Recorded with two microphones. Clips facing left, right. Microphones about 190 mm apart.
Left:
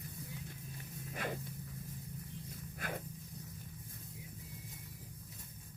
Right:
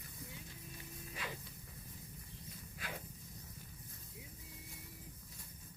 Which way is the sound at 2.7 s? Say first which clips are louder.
Left 5 dB; 50° left (ahead or behind).